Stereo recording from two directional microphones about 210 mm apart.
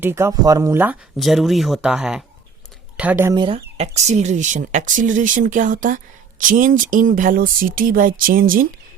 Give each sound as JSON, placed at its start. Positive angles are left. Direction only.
{"t": 0.0, "sound": "speech", "side_deg": -10}
{"t": 3.3, "sound": "speech", "side_deg": -25}